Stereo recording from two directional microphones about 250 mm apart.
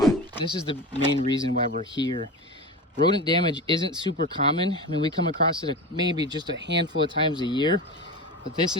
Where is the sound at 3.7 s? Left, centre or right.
Right.